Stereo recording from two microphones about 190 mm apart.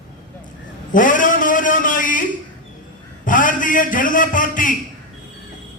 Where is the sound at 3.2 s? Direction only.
45° left (ahead or behind).